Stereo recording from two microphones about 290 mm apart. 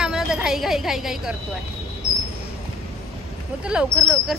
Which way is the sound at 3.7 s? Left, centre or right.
Centre.